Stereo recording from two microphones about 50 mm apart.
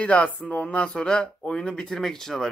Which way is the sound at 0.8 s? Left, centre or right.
Centre.